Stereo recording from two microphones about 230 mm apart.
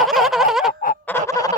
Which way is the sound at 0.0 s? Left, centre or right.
Centre.